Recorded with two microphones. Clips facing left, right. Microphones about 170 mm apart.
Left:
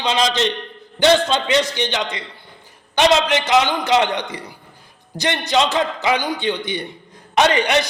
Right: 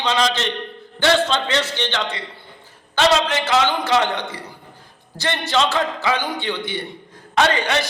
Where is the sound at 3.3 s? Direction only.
20° left (ahead or behind).